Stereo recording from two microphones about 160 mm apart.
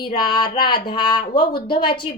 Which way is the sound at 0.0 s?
25° left (ahead or behind).